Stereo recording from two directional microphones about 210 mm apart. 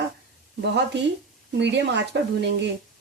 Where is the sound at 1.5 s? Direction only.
55° right (ahead or behind).